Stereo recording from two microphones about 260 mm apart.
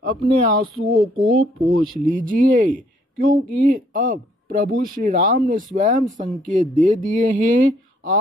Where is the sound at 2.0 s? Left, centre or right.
Right.